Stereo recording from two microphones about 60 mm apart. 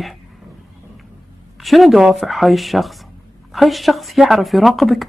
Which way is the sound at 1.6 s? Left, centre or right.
Centre.